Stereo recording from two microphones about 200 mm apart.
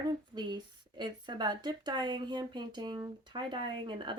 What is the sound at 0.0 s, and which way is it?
Speech, 20° right (ahead or behind).